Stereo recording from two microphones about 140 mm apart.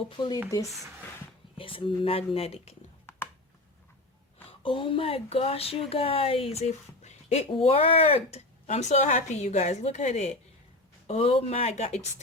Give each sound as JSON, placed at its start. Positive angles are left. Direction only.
{"t": 0.2, "sound": "speech", "side_deg": 30}
{"t": 1.5, "sound": "speech", "side_deg": 40}
{"t": 4.6, "sound": "speech", "side_deg": 40}